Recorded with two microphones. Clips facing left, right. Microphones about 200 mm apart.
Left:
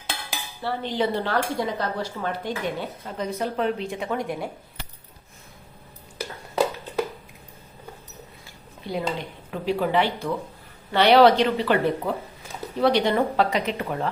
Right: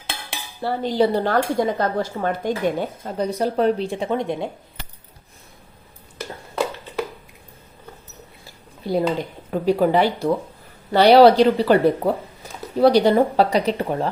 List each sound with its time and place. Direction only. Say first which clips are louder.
0.6 s speech: right 6 dB; 40° right (ahead or behind); by 4.5 s 25° right (ahead or behind)
8.4 s a sound: right 7 dB; 40° right (ahead or behind)
9.5 s speech: right 6 dB; 40° right (ahead or behind)